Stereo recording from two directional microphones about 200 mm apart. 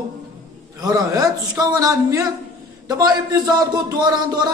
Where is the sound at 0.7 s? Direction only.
20° right (ahead or behind).